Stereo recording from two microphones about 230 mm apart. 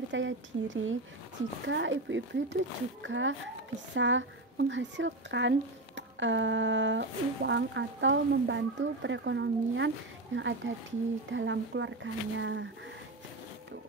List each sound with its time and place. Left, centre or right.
0.1 s speech: right